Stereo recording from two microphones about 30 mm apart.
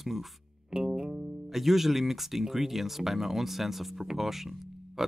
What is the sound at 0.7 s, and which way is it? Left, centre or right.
Music, centre.